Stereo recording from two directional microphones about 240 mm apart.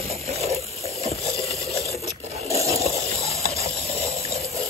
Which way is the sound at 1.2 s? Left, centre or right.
Centre.